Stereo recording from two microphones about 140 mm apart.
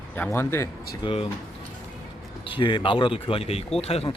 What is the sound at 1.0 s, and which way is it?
Speech, 40° left (ahead or behind).